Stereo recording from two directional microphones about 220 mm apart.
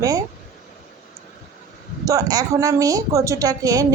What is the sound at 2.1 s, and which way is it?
A woman's voice, 15° right (ahead or behind).